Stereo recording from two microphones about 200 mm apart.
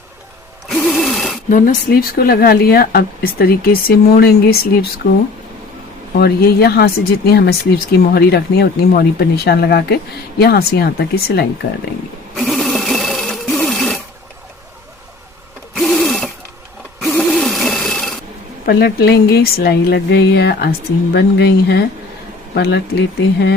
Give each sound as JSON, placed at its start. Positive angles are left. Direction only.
{"t": 0.7, "sound": "a sound", "side_deg": 0}
{"t": 1.5, "sound": "speech", "side_deg": 45}
{"t": 6.1, "sound": "speech", "side_deg": 50}
{"t": 12.4, "sound": "sewing machine", "side_deg": 0}
{"t": 15.7, "sound": "sewing machine", "side_deg": 0}
{"t": 17.1, "sound": "a sound", "side_deg": 0}
{"t": 18.6, "sound": "speech", "side_deg": 50}